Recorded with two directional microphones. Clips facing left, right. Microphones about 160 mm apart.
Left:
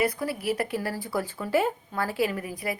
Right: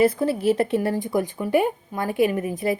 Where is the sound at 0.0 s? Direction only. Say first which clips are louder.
Right 8 dB; 25° right (ahead or behind).